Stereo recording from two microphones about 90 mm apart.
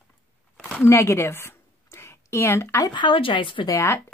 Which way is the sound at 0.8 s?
30° left (ahead or behind).